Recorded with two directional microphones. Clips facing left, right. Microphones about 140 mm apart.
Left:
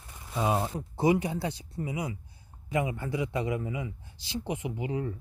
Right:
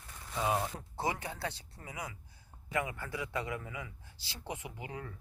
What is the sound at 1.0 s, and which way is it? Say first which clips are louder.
A man's voice: left 10 dB; 15° left (ahead or behind).